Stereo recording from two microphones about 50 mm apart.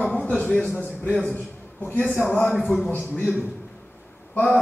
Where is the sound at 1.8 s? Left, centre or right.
Left.